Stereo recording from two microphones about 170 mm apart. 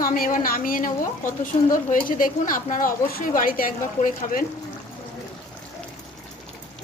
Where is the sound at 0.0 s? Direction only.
60° left (ahead or behind).